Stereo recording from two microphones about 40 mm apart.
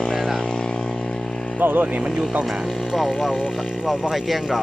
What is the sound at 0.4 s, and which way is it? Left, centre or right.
Vehicle, centre.